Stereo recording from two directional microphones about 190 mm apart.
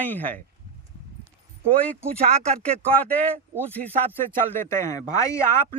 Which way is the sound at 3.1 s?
5° left (ahead or behind).